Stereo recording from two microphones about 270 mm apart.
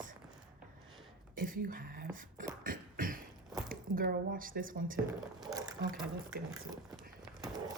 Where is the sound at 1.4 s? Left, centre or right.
Right.